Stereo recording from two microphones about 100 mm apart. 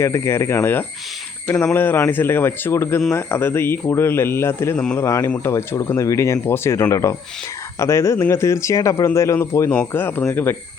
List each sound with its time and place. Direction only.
0.0 s speech: 30° left (ahead or behind)